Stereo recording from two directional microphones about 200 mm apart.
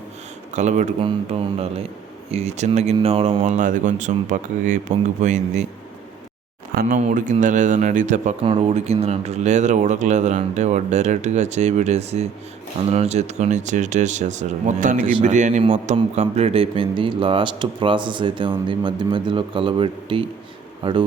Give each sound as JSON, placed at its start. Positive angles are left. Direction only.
{"t": 0.5, "sound": "speech", "side_deg": -35}
{"t": 6.8, "sound": "speech", "side_deg": -35}